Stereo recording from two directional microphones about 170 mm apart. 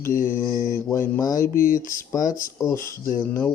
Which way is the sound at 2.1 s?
20° left (ahead or behind).